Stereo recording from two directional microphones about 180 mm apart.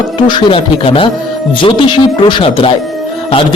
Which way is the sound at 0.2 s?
25° left (ahead or behind).